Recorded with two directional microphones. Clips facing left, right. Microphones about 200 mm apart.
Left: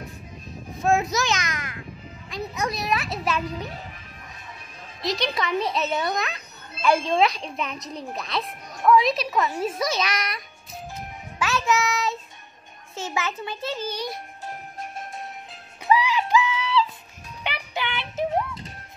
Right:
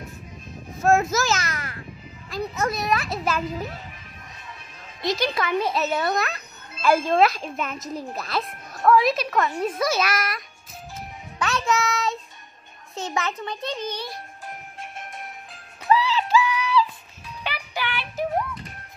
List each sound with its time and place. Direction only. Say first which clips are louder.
0.8 s a child's voice: right 2 dB; centre (ahead or behind)
5.0 s a child's voice: right 2 dB; centre (ahead or behind)
11.4 s a child's voice: even; centre (ahead or behind)
15.9 s a sound: even; 15° left (ahead or behind)
17.4 s music: even; 20° left (ahead or behind)